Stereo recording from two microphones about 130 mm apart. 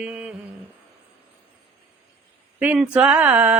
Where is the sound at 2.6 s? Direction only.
10° right (ahead or behind).